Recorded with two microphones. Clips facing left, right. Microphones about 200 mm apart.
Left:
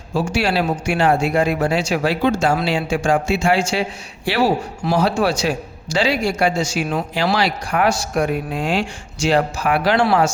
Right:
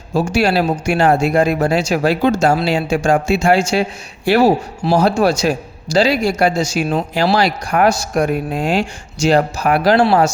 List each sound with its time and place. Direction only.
0.1 s speech: 40° right (ahead or behind)